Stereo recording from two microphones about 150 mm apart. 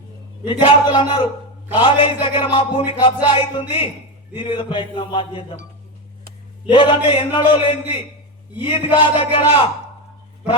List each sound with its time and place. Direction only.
0.9 s music: 30° left (ahead or behind)
6.7 s music: 35° left (ahead or behind)